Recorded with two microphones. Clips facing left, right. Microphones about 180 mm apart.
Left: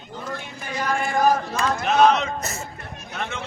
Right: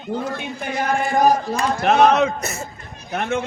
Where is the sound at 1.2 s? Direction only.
40° right (ahead or behind).